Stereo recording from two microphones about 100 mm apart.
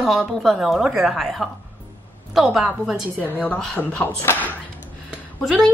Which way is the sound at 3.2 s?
15° left (ahead or behind).